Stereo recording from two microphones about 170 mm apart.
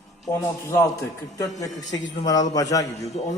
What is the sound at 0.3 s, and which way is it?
A man's voice, 15° left (ahead or behind).